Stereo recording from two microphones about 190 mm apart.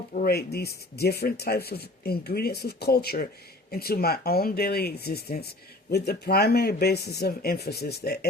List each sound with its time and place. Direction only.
0.1 s speech: 50° left (ahead or behind)